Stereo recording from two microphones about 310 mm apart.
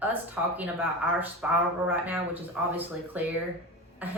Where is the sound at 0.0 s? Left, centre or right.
Centre.